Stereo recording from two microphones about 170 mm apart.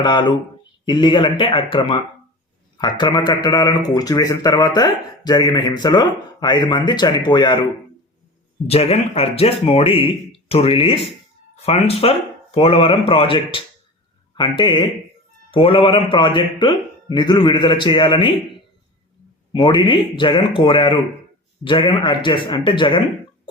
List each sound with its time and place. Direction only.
0.0 s speech: 25° left (ahead or behind)
8.6 s speech: 35° left (ahead or behind)
19.5 s speech: 30° left (ahead or behind)